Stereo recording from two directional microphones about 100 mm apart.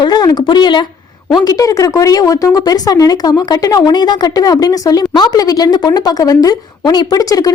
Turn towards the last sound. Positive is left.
turn(degrees=35)  # may be behind; listen again after turning